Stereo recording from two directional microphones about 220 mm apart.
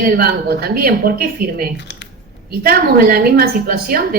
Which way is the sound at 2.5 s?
45° right (ahead or behind).